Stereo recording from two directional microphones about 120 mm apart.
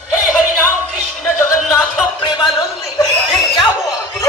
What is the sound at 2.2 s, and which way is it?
Music, 40° left (ahead or behind).